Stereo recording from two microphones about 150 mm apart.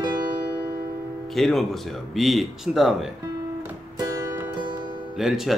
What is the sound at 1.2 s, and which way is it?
Speech, centre (ahead or behind).